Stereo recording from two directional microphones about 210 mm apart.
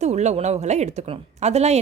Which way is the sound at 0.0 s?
35° right (ahead or behind).